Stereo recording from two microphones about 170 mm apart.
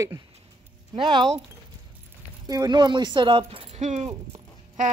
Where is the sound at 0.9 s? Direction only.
30° right (ahead or behind).